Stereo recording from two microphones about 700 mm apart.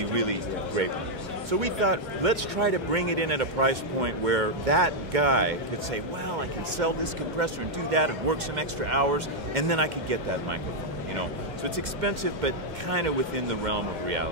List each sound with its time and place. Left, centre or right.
0.1 s a sound: right
1.5 s speech: right
6.8 s speech: right
11.7 s speech: right